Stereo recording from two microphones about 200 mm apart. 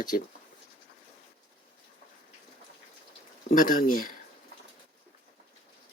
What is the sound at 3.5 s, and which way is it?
Speech, 45° left (ahead or behind).